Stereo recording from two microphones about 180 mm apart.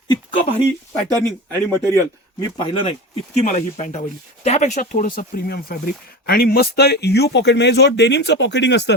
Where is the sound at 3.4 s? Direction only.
45° left (ahead or behind).